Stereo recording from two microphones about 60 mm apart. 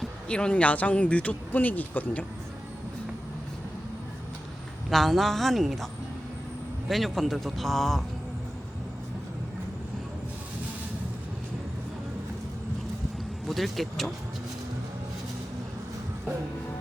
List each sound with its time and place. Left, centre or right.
0.3 s speech: centre
4.9 s speech: centre
13.5 s speech: centre